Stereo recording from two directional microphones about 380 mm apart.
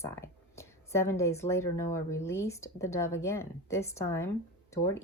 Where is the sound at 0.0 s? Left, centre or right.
Centre.